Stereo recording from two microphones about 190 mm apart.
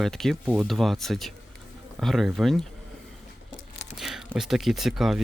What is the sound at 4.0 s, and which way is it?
Speech, 5° right (ahead or behind).